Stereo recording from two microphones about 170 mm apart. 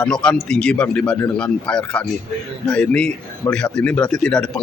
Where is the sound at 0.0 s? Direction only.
5° left (ahead or behind).